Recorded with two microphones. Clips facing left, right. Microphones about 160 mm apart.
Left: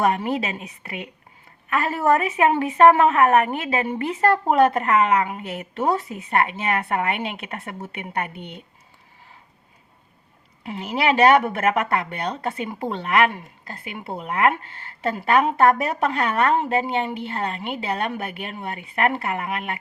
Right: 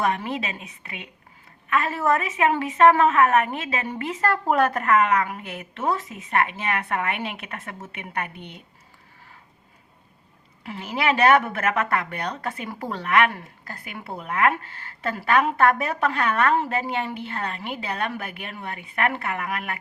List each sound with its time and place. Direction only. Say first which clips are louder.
0.0 s a woman's voice: left 4 dB; 35° left (ahead or behind)
11.0 s a woman's voice: left 2 dB; 30° left (ahead or behind)